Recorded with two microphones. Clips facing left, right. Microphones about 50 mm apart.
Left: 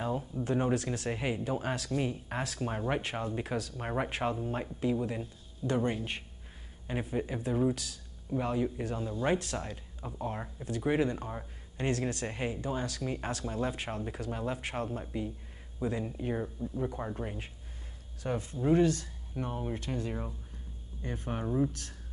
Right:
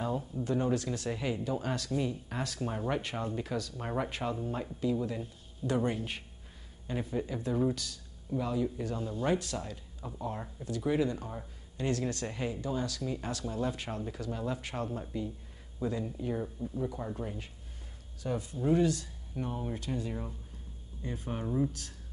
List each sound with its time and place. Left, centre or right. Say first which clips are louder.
0.4 s speech: left 1 dB; left
5.7 s a man's voice: even; centre
6.9 s speech: left 1 dB; left
8.4 s speech: left 1 dB; left
18.2 s speech: left 1 dB; left
21.4 s speech: left 1 dB; centre